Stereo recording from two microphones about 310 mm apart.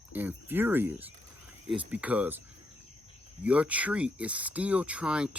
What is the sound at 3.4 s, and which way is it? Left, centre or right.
Speech, centre.